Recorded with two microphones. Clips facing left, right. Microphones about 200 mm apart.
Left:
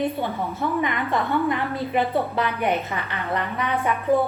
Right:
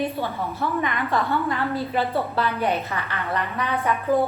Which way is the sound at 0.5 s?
15° left (ahead or behind).